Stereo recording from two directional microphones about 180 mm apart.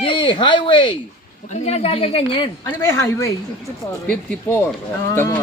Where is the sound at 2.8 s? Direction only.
15° left (ahead or behind).